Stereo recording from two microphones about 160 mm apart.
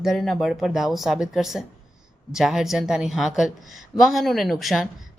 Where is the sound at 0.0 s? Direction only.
Centre (ahead or behind).